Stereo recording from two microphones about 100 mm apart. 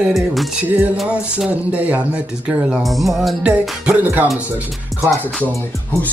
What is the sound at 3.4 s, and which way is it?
Speech, 10° right (ahead or behind).